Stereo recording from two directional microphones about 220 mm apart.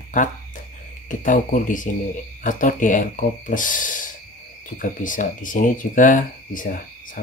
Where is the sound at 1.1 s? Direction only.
35° left (ahead or behind).